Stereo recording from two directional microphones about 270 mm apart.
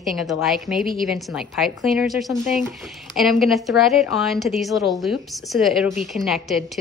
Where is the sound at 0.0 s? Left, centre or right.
Centre.